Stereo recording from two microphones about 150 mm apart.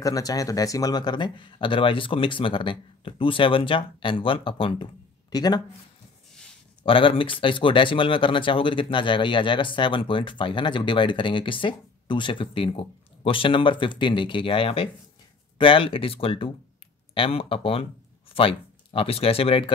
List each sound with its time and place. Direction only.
0.0 s speech: 25° left (ahead or behind)
6.8 s speech: 35° left (ahead or behind)